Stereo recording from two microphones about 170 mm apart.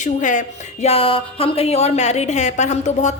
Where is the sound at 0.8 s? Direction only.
35° left (ahead or behind).